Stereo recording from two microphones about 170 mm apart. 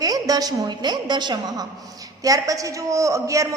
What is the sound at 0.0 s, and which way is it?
A woman's voice, 20° right (ahead or behind).